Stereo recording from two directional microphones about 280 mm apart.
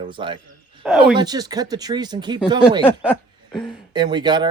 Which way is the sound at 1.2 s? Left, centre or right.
Centre.